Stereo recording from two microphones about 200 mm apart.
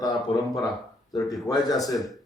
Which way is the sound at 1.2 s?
Centre (ahead or behind).